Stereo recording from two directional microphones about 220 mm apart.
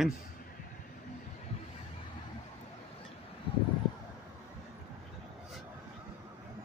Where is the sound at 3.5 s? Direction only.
25° left (ahead or behind).